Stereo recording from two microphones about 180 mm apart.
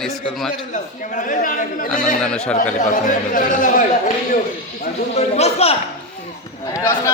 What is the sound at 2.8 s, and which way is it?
A man's voice, 45° left (ahead or behind).